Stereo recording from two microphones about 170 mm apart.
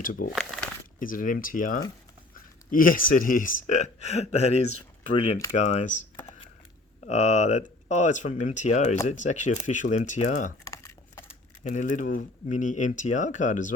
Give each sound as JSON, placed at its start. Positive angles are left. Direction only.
{"t": 0.0, "sound": "speech", "side_deg": 55}
{"t": 10.7, "sound": "a sound", "side_deg": 15}
{"t": 11.6, "sound": "speech", "side_deg": 45}